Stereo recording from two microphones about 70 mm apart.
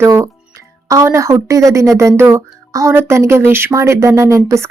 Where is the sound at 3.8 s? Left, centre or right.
Right.